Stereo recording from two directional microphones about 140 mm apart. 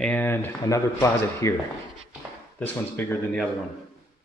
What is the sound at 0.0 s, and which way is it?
Speech, 10° left (ahead or behind).